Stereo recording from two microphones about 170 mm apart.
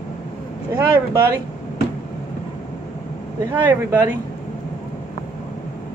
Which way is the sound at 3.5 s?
10° right (ahead or behind).